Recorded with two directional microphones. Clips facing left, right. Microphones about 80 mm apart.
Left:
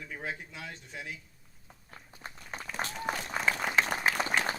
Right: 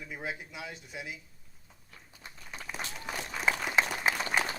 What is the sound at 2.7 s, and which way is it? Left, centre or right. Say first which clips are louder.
Run: left 5 dB; left.